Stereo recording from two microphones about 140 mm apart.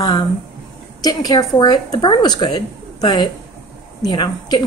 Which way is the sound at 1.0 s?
30° left (ahead or behind).